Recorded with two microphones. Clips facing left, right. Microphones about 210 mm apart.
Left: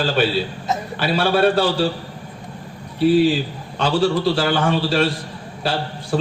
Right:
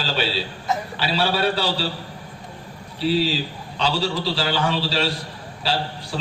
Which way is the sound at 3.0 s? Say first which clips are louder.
Left 6 dB; 50° left (ahead or behind).